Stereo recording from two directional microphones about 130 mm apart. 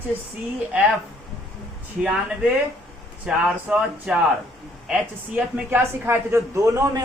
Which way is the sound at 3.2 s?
5° right (ahead or behind).